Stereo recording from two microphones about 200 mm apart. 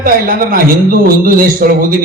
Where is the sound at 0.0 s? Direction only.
45° right (ahead or behind).